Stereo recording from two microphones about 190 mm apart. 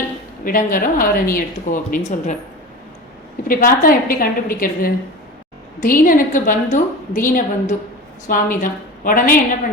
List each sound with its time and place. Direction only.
0.4 s a woman's voice: 45° left (ahead or behind)
3.4 s a woman's voice: 50° left (ahead or behind)